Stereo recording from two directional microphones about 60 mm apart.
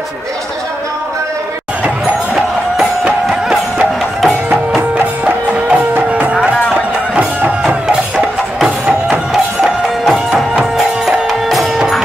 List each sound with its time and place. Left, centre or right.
2.8 s music: right
3.3 s music: centre
4.9 s music: right
9.3 s music: centre
11.2 s music: centre